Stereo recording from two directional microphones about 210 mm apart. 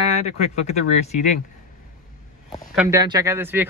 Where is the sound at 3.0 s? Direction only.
15° right (ahead or behind).